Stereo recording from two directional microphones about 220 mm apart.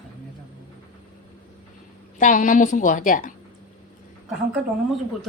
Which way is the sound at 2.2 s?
35° left (ahead or behind).